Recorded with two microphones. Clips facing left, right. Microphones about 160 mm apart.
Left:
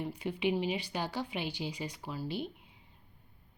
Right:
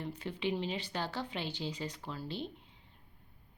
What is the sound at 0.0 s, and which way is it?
Speech, 10° left (ahead or behind).